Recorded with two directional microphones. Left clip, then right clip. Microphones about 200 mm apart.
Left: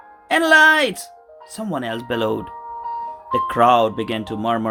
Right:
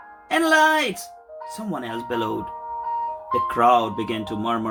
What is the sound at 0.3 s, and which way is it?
Speech, 35° left (ahead or behind).